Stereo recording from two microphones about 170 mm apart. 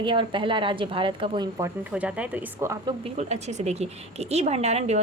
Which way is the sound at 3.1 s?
40° right (ahead or behind).